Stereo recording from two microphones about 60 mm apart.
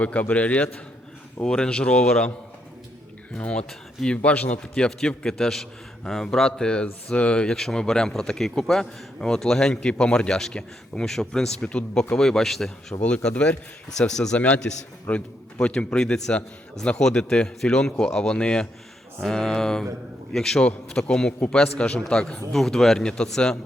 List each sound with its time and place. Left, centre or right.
0.0 s a man's voice: left
1.5 s a man's voice: centre
3.3 s a man's voice: centre
13.1 s a man's voice: centre
13.9 s a man's voice: centre
14.3 s a man's voice: left